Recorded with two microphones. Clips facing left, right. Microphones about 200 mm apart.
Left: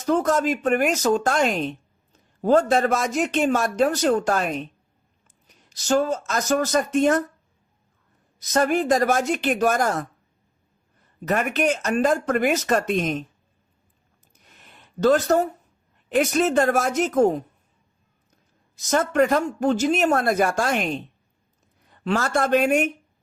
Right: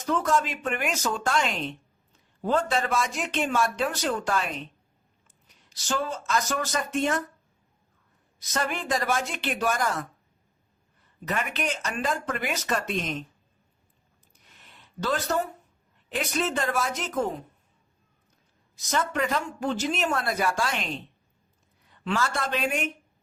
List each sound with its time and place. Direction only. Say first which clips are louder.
0.0 s a man's voice: left 5 dB; 40° left (ahead or behind)
5.7 s a man's voice: left 9 dB; 45° left (ahead or behind)
8.4 s a man's voice: left 10 dB; 45° left (ahead or behind)
11.3 s a man's voice: left 8 dB; 45° left (ahead or behind)
14.7 s a sound: left 11 dB; 50° left (ahead or behind)
16.0 s a man's voice: left 8 dB; 45° left (ahead or behind)
18.9 s a man's voice: left 8 dB; 50° left (ahead or behind)